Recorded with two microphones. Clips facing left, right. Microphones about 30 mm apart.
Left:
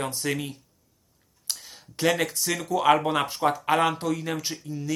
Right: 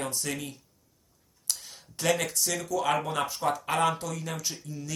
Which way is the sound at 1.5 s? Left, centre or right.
Left.